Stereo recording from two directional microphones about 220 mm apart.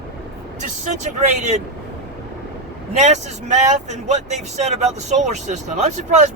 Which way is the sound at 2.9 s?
30° right (ahead or behind).